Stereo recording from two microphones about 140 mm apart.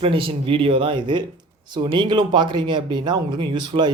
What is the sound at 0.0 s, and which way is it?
Speech, 40° right (ahead or behind).